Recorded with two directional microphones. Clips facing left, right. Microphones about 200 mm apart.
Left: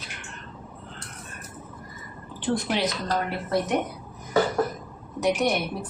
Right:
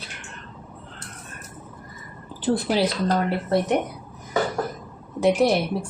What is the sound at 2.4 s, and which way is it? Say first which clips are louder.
Speech: right 4 dB; 35° right (ahead or behind).